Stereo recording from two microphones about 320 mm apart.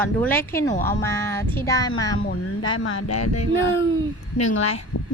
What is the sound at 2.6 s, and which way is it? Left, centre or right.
Speech, left.